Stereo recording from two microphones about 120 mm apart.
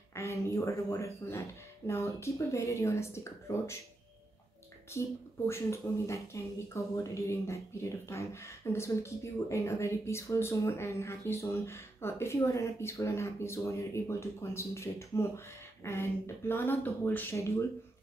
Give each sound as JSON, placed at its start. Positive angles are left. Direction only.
{"t": 0.1, "sound": "speech", "side_deg": 25}
{"t": 4.9, "sound": "speech", "side_deg": 25}